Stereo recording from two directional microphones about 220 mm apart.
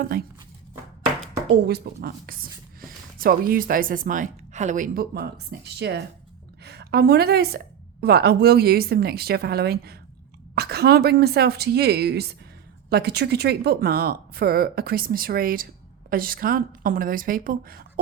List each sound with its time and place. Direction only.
0.0 s speech: 40° right (ahead or behind)
1.5 s a woman's voice: 45° right (ahead or behind)